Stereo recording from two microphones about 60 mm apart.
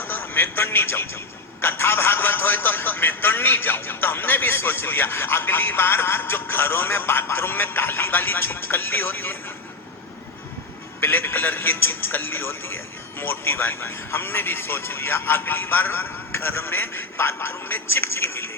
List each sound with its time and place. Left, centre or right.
0.0 s speech: left
11.0 s speech: left